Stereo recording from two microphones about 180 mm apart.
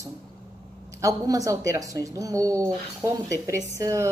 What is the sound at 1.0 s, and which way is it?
A woman's voice, 20° right (ahead or behind).